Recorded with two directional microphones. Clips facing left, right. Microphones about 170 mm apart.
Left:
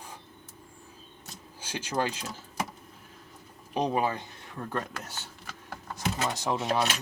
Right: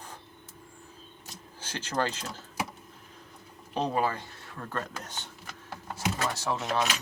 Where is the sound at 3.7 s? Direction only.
15° left (ahead or behind).